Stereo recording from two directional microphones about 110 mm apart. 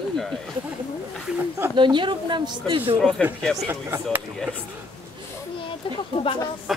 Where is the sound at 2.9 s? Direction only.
5° left (ahead or behind).